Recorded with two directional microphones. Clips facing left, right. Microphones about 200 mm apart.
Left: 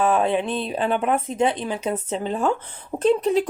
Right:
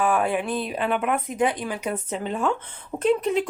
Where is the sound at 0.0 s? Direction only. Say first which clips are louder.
Left 3 dB; 25° left (ahead or behind).